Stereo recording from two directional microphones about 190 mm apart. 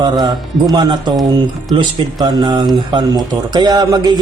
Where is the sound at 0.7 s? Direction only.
25° right (ahead or behind).